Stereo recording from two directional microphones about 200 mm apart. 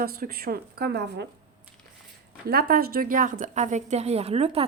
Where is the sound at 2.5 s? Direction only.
50° right (ahead or behind).